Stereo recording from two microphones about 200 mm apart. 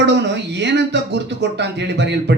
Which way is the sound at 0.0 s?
60° right (ahead or behind).